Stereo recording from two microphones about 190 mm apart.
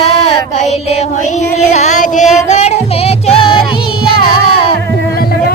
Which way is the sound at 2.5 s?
35° left (ahead or behind).